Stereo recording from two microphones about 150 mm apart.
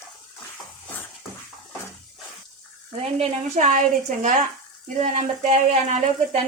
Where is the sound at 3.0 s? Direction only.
50° right (ahead or behind).